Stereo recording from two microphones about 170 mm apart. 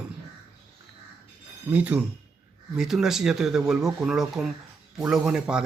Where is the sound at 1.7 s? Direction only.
10° right (ahead or behind).